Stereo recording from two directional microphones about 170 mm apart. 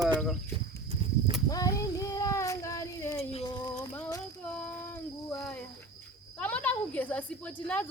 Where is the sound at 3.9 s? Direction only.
15° left (ahead or behind).